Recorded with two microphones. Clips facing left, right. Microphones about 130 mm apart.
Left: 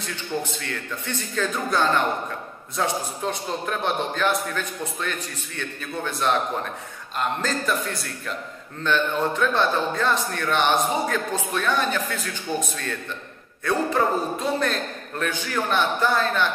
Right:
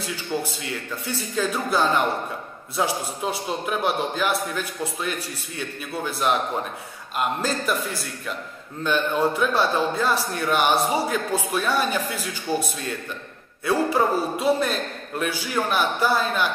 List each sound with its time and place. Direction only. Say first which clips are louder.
0.0 s a man's voice: right 1 dB; 10° right (ahead or behind)